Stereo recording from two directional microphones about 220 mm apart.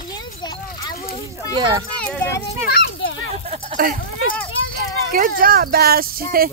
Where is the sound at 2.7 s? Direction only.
50° left (ahead or behind).